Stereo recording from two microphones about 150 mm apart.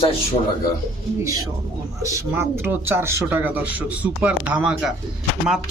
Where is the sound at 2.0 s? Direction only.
20° right (ahead or behind).